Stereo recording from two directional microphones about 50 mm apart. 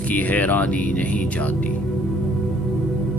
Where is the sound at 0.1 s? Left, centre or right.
Left.